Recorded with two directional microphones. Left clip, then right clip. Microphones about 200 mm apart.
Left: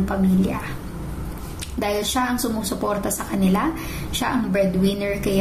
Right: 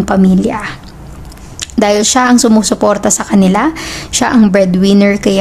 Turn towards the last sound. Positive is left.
turn(degrees=-45)  # may be behind; listen again after turning